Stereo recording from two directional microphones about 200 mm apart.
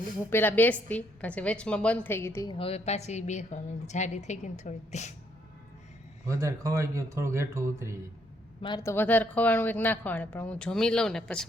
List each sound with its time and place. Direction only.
0.3 s speech: 10° left (ahead or behind)
2.6 s a woman's voice: 30° left (ahead or behind)
6.2 s a man's voice: 15° right (ahead or behind)
8.6 s speech: 20° left (ahead or behind)